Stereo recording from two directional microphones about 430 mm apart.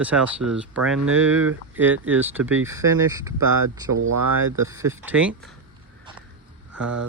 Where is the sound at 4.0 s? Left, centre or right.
Right.